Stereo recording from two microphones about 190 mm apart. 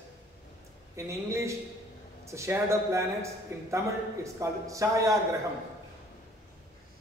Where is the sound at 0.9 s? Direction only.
15° right (ahead or behind).